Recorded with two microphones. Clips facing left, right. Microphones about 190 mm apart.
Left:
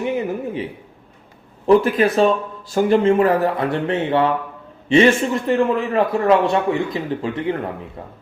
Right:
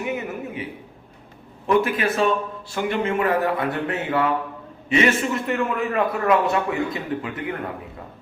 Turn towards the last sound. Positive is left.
turn(degrees=30)  # may be behind; listen again after turning